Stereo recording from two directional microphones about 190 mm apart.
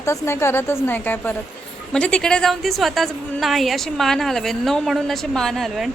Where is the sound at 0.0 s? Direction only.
15° left (ahead or behind).